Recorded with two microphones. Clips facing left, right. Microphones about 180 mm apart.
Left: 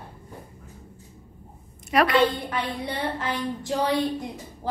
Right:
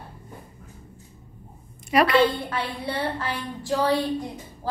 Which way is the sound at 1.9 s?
Centre (ahead or behind).